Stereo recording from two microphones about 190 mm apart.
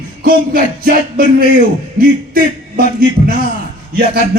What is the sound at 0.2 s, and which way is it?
Music, 50° right (ahead or behind).